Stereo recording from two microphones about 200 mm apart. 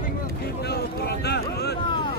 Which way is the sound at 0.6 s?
55° left (ahead or behind).